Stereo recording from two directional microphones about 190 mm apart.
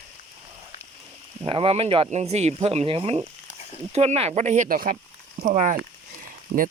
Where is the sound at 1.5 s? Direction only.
30° right (ahead or behind).